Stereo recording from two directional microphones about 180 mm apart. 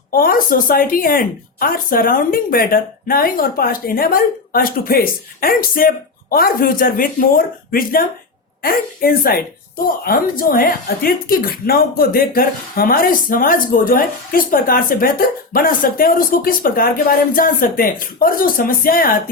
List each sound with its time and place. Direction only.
0.1 s a woman's voice: 55° left (ahead or behind)